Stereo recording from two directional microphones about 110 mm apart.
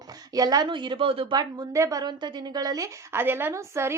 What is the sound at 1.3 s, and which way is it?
A woman's voice, 35° right (ahead or behind).